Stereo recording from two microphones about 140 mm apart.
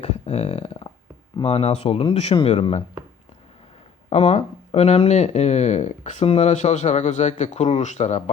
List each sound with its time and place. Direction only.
0.0 s a sound: 50° left (ahead or behind)
1.4 s speech: 45° left (ahead or behind)
4.1 s speech: 50° left (ahead or behind)